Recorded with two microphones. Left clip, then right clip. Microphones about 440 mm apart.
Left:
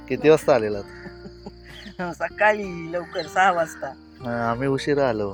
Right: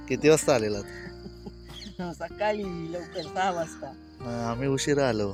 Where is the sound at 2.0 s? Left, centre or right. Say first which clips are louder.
Left 9 dB; right.